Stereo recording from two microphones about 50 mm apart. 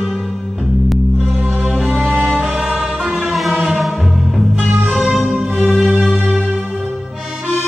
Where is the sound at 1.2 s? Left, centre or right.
Right.